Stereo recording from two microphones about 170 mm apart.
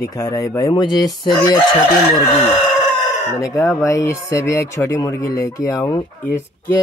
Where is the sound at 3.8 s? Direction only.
15° left (ahead or behind).